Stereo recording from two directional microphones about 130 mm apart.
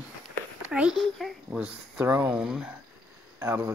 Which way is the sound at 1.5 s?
10° right (ahead or behind).